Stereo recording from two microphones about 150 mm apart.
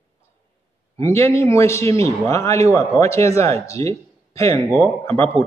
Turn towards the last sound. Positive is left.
turn(degrees=15)  # may be behind; listen again after turning